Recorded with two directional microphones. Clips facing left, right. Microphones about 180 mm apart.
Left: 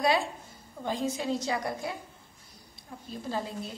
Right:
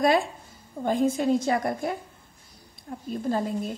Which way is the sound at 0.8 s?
50° right (ahead or behind).